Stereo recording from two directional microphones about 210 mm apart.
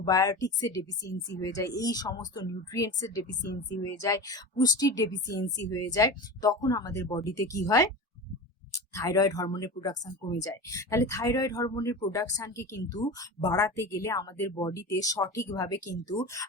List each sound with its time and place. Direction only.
0.0 s speech: 15° left (ahead or behind)